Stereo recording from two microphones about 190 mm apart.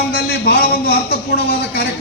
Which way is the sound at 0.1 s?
60° left (ahead or behind).